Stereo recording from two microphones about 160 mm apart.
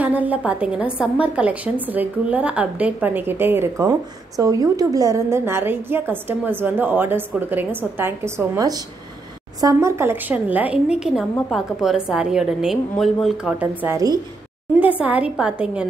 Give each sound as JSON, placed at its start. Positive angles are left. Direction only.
{"t": 0.0, "sound": "a woman's voice", "side_deg": -10}
{"t": 14.8, "sound": "a woman's voice", "side_deg": -10}